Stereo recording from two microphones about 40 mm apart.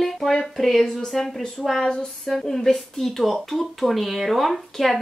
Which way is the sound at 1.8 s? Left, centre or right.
Centre.